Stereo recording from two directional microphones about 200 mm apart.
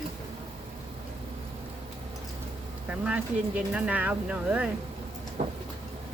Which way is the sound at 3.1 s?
5° right (ahead or behind).